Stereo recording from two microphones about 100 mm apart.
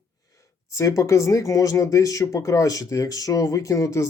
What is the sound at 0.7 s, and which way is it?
Speech, 30° left (ahead or behind).